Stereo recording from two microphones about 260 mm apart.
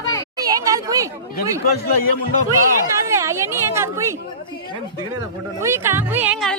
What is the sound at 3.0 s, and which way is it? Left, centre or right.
Speech, centre.